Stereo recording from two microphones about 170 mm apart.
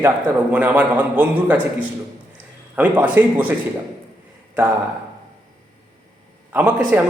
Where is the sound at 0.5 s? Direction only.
10° right (ahead or behind).